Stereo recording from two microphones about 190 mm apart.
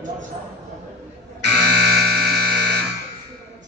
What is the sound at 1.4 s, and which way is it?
Music, 60° right (ahead or behind).